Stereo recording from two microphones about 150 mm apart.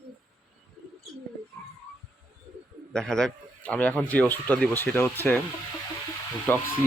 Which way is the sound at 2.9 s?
5° left (ahead or behind).